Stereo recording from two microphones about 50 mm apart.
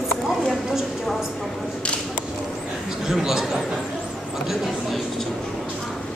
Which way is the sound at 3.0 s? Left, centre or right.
Centre.